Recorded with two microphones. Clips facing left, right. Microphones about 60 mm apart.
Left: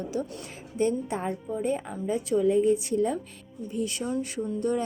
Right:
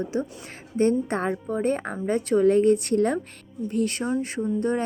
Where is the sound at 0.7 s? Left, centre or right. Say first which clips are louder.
Right 5 dB; right.